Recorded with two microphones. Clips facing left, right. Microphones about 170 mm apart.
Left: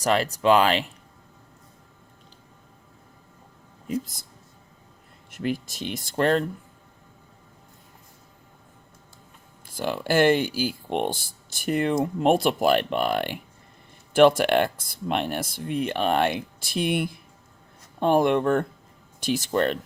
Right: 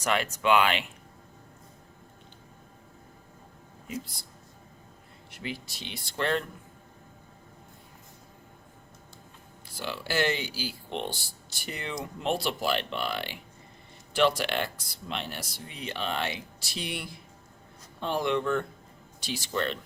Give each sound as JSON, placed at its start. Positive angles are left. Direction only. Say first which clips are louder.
{"t": 0.0, "sound": "speech", "louder": "left 6 dB", "side_deg": 35}
{"t": 4.0, "sound": "speech", "louder": "left 1 dB", "side_deg": 45}
{"t": 5.3, "sound": "speech", "louder": "left 10 dB", "side_deg": 50}
{"t": 9.6, "sound": "speech", "louder": "left 9 dB", "side_deg": 50}